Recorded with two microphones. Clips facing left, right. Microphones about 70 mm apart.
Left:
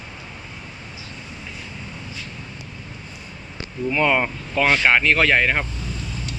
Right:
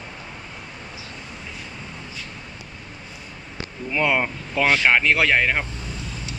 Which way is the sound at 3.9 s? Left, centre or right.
Centre.